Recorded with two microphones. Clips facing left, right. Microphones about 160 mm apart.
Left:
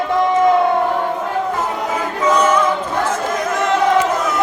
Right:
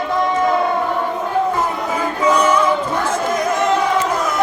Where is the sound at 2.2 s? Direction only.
10° right (ahead or behind).